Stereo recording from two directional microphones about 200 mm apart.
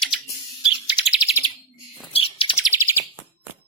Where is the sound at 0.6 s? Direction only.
5° right (ahead or behind).